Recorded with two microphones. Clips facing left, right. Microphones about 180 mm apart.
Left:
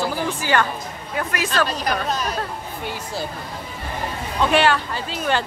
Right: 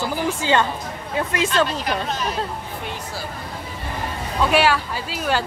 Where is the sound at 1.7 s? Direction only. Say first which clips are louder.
Left 1 dB; 40° left (ahead or behind).